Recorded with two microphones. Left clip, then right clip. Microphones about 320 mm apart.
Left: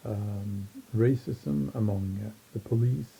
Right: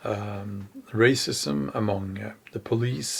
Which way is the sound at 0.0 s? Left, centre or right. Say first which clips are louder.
Right 8 dB; centre.